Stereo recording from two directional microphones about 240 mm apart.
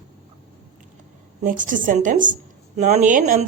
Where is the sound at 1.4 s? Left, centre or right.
Right.